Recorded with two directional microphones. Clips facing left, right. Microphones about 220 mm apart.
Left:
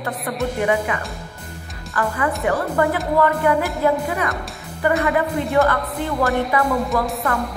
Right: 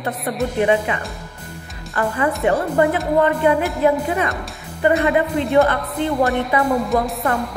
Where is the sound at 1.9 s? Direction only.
25° right (ahead or behind).